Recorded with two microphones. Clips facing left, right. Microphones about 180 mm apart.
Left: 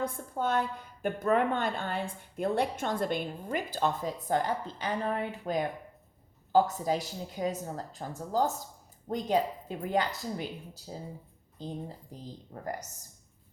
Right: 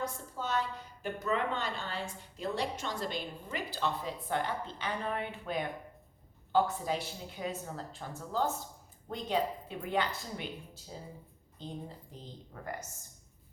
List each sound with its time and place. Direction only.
0.0 s a woman's voice: 55° left (ahead or behind)